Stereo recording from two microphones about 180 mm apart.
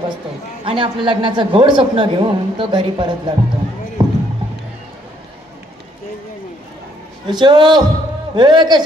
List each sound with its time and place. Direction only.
0.7 s a woman's voice: 30° right (ahead or behind)
4.0 s basketball bounce: 25° right (ahead or behind)
7.2 s a woman's voice: 25° right (ahead or behind)